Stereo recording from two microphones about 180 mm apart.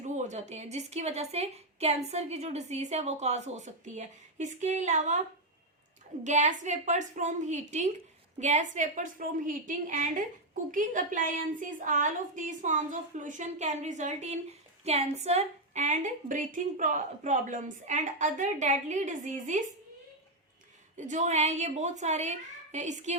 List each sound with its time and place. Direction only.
0.0 s a woman's voice: 40° right (ahead or behind)
6.2 s a woman's voice: 40° right (ahead or behind)
20.9 s a woman's voice: 40° right (ahead or behind)